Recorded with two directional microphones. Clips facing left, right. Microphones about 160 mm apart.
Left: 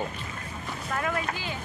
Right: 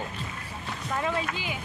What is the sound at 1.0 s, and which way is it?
Speech, 20° right (ahead or behind).